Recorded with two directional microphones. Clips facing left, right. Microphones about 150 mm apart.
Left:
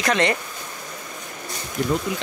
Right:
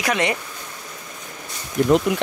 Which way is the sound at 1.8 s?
55° right (ahead or behind).